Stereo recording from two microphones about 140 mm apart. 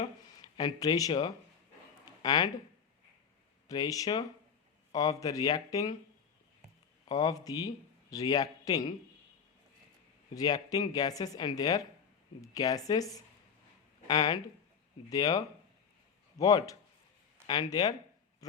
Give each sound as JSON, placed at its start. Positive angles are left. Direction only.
{"t": 0.4, "sound": "speech", "side_deg": 30}
{"t": 3.7, "sound": "speech", "side_deg": 25}
{"t": 7.1, "sound": "speech", "side_deg": 30}
{"t": 10.3, "sound": "speech", "side_deg": 30}